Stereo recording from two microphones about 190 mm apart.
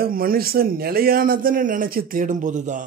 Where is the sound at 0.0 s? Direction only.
50° right (ahead or behind).